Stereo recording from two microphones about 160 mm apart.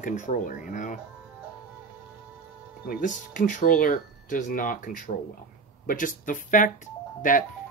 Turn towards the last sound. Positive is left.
turn(degrees=55)  # may be behind; listen again after turning